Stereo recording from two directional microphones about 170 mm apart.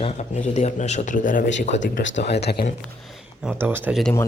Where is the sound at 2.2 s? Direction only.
80° left.